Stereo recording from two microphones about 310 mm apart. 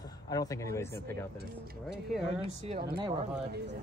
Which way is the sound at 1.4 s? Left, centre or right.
Right.